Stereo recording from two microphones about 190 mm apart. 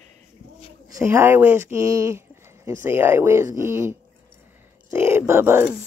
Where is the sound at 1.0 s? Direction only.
10° right (ahead or behind).